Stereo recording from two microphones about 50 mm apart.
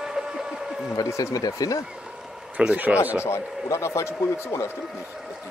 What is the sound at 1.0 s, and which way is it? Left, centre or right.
Speech, left.